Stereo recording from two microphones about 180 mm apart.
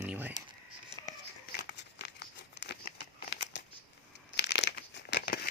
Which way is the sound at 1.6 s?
70° left (ahead or behind).